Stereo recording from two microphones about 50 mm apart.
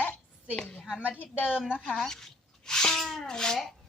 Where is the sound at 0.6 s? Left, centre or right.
Centre.